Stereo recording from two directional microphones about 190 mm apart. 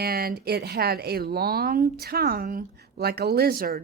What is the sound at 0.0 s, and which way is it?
Speech, 55° right (ahead or behind).